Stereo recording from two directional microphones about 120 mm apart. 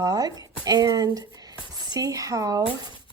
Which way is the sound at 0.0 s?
30° right (ahead or behind).